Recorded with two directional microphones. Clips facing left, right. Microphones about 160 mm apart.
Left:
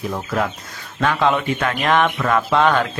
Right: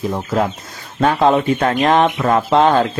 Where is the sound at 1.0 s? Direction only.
35° right (ahead or behind).